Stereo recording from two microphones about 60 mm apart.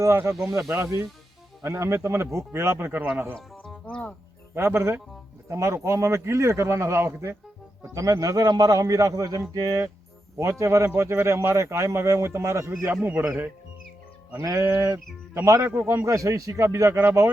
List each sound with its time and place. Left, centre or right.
0.2 s speech: right
3.3 s music: centre
3.8 s music: left
4.5 s speech: right
7.9 s a man's voice: right
9.5 s speech: right
10.3 s speech: right
12.8 s a man's voice: right
14.4 s speech: right